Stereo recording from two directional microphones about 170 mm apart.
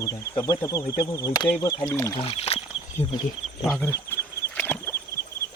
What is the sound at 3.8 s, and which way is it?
Speech, 15° left (ahead or behind).